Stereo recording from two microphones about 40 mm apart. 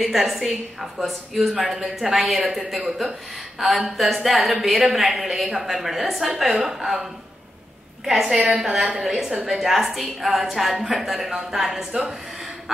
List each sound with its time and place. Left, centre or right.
0.0 s a woman's voice: centre